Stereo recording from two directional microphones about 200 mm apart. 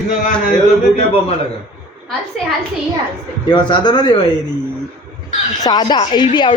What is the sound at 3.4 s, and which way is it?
Speech, 20° left (ahead or behind).